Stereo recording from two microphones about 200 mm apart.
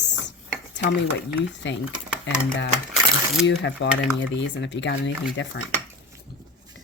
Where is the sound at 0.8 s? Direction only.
65° left (ahead or behind).